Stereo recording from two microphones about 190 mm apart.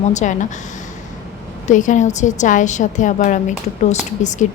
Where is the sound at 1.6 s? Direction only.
40° left (ahead or behind).